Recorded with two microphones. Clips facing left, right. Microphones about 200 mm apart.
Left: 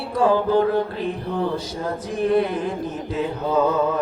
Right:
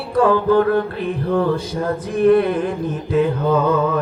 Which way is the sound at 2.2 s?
55° right (ahead or behind).